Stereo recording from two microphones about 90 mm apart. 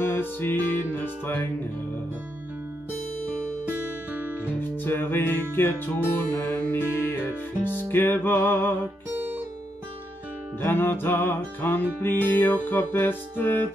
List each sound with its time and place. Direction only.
0.0 s music: 25° left (ahead or behind)
3.6 s music: 20° right (ahead or behind)
4.6 s music: 25° left (ahead or behind)
9.1 s music: 20° right (ahead or behind)
10.6 s music: 25° left (ahead or behind)